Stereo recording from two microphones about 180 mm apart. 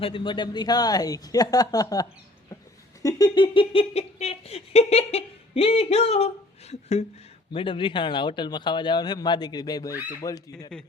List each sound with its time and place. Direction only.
0.0 s speech: 30° left (ahead or behind)